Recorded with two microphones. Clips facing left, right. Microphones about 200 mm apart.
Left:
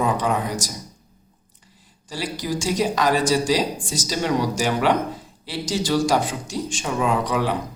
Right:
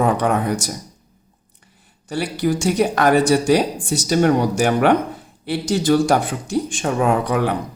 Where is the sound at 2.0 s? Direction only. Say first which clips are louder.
Right 7 dB; 65° right (ahead or behind).